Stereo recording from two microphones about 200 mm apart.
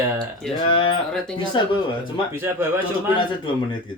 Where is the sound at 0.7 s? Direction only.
25° left (ahead or behind).